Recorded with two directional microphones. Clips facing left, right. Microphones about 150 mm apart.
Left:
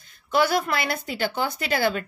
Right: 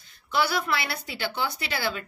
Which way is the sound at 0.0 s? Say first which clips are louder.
Left 4 dB; 50° left (ahead or behind).